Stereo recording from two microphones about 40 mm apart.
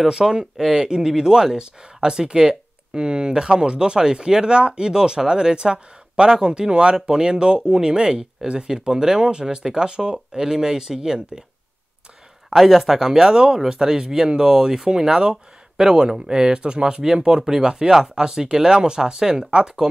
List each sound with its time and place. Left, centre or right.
0.0 s speech: centre
12.5 s speech: centre